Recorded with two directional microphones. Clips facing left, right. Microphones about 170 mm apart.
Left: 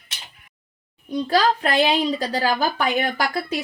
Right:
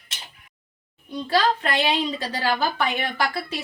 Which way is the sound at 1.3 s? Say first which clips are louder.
Left 2 dB; 40° left (ahead or behind).